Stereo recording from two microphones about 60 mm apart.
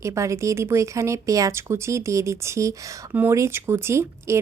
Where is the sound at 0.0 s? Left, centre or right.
Right.